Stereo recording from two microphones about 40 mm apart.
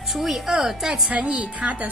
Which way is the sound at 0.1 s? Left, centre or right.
Centre.